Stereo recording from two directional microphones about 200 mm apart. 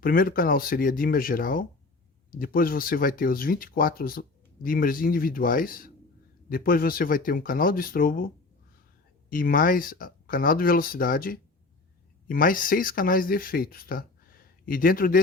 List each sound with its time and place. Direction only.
0.0 s speech: 45° left (ahead or behind)
9.3 s speech: 45° left (ahead or behind)